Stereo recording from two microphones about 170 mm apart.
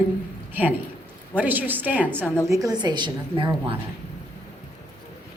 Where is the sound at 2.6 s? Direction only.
25° right (ahead or behind).